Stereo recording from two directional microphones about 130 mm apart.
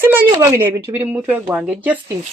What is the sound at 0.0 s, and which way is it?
Speech, 15° right (ahead or behind).